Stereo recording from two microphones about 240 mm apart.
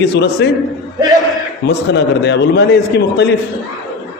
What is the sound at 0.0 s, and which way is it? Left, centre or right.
Speech, left.